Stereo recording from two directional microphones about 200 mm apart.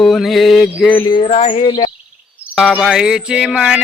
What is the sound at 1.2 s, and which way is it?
Speech, 30° left (ahead or behind).